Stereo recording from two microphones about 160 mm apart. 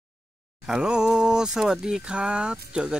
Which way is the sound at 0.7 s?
5° right (ahead or behind).